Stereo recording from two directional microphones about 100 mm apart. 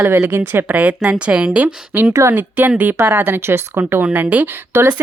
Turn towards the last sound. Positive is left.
turn(degrees=-25)  # may be behind; listen again after turning